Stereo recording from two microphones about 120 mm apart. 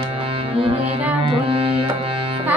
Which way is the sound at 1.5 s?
50° right (ahead or behind).